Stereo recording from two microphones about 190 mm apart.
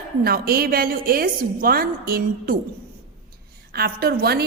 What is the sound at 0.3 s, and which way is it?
A woman's voice, 55° right (ahead or behind).